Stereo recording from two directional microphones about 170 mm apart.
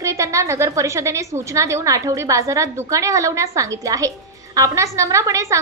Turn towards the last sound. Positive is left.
turn(degrees=-20)  # may be behind; listen again after turning